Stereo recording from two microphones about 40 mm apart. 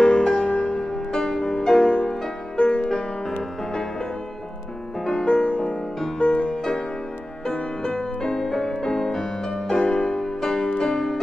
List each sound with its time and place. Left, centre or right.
0.2 s music: centre
0.5 s music: left
2.9 s music: centre
5.1 s music: left